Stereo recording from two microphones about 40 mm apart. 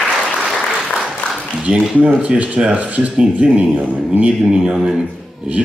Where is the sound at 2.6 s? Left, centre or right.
Right.